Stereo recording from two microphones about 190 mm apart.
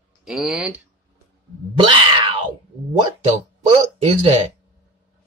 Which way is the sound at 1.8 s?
25° right (ahead or behind).